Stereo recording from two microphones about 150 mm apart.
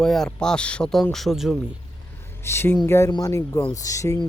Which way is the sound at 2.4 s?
15° left (ahead or behind).